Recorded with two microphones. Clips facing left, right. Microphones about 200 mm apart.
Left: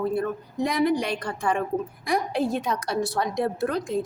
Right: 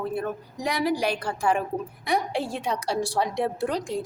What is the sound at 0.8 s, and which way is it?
Speech, 5° right (ahead or behind).